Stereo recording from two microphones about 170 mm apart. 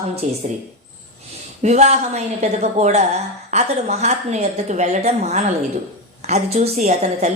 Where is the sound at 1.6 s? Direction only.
40° right (ahead or behind).